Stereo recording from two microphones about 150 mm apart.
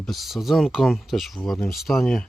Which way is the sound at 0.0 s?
Centre (ahead or behind).